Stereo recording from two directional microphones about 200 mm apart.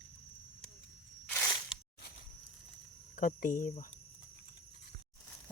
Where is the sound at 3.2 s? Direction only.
40° left (ahead or behind).